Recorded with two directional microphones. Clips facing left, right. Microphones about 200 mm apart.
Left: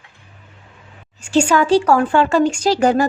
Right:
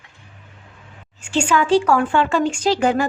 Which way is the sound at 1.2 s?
40° left (ahead or behind).